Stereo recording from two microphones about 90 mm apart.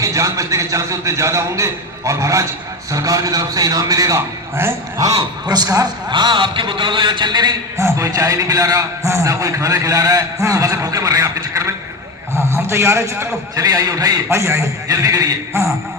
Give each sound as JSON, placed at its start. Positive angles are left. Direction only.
{"t": 0.0, "sound": "a man's voice", "side_deg": -35}
{"t": 4.6, "sound": "speech", "side_deg": -25}
{"t": 4.9, "sound": "a man's voice", "side_deg": -40}
{"t": 7.8, "sound": "a man's voice", "side_deg": -35}
{"t": 14.3, "sound": "a man's voice", "side_deg": -30}